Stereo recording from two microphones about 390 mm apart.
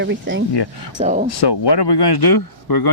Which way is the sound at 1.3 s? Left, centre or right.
Left.